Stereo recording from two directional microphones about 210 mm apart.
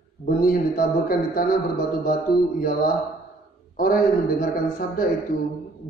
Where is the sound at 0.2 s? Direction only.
45° left (ahead or behind).